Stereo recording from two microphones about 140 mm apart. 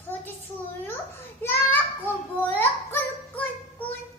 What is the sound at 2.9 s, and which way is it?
Child singing, 15° left (ahead or behind).